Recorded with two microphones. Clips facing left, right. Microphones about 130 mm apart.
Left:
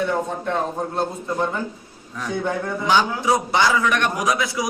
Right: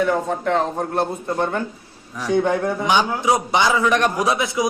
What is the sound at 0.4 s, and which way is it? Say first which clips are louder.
A man's voice: right 3 dB; 75° right (ahead or behind).